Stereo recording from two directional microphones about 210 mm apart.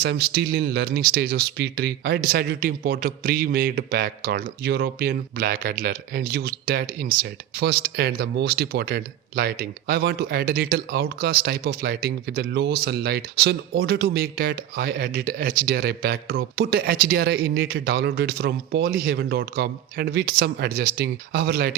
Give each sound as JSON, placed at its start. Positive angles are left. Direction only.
{"t": 0.0, "sound": "speech", "side_deg": -50}